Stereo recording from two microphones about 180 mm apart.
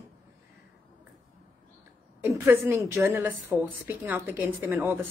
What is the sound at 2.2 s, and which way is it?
A woman's voice, 10° right (ahead or behind).